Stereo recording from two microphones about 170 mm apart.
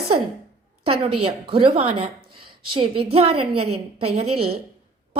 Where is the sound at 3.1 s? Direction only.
35° right (ahead or behind).